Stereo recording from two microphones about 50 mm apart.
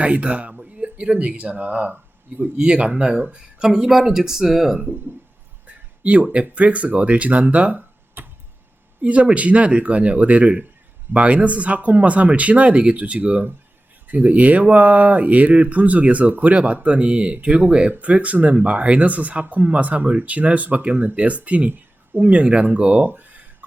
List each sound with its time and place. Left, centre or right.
0.0 s speech: right; by 4.8 s centre
5.6 s speech: right
8.2 s tick-tock: right
9.0 s speech: right
21.7 s a sound: right
22.3 s speech: right
23.0 s a sound: right